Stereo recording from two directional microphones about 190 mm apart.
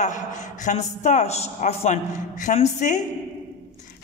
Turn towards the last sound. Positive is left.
turn(degrees=40)  # may be behind; listen again after turning